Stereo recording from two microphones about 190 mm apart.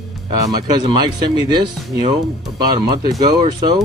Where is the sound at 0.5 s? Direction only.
20° right (ahead or behind).